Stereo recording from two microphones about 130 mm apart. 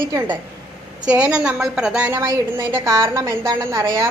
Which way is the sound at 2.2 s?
25° right (ahead or behind).